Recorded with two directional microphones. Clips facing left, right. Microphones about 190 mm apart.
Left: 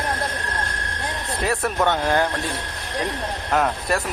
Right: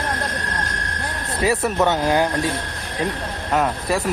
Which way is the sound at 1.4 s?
5° right (ahead or behind).